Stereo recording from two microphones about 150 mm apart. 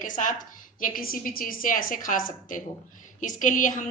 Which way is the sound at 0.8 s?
70° left (ahead or behind).